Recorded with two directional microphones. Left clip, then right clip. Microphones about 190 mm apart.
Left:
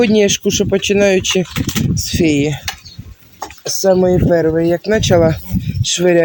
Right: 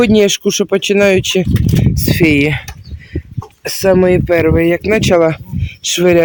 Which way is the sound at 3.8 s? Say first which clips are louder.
Right 2 dB; 30° right (ahead or behind).